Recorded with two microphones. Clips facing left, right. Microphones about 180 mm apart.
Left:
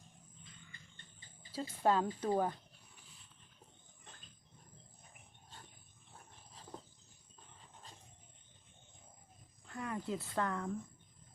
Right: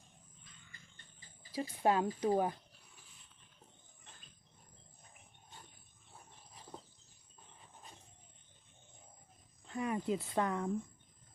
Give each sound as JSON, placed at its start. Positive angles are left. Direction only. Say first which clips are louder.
{"t": 1.5, "sound": "speech", "louder": "right 1 dB", "side_deg": -15}
{"t": 9.6, "sound": "speech", "louder": "right 5 dB", "side_deg": -15}